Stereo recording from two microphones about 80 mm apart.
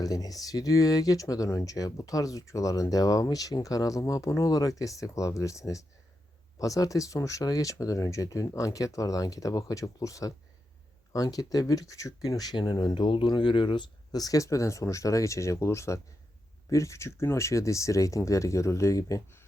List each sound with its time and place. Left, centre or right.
0.0 s speech: left
14.2 s speech: left